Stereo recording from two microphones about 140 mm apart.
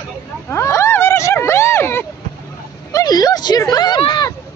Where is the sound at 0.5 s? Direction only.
20° left (ahead or behind).